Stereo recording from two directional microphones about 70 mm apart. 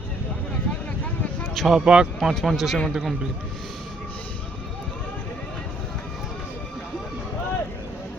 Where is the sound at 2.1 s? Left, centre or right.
Centre.